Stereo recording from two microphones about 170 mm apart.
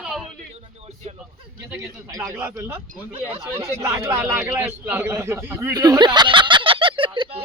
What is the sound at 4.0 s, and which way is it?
Speech, 15° right (ahead or behind).